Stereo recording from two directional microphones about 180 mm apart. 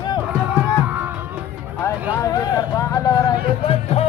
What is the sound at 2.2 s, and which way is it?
Music, 20° left (ahead or behind).